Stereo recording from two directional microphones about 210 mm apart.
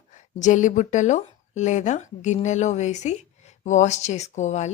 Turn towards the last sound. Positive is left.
turn(degrees=35)  # may be behind; listen again after turning